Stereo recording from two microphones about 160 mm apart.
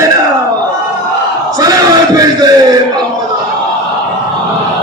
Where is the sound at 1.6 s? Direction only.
25° right (ahead or behind).